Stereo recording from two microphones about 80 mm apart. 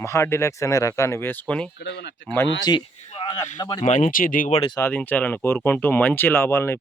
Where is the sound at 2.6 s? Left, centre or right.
Left.